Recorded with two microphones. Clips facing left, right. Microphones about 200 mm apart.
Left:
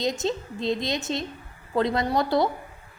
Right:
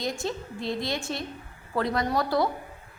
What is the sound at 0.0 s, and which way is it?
A woman's voice, 20° left (ahead or behind).